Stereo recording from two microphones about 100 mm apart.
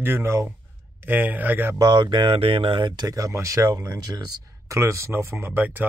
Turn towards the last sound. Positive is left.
turn(degrees=-20)  # may be behind; listen again after turning